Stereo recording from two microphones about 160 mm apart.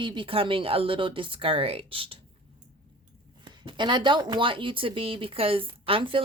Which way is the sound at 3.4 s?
30° right (ahead or behind).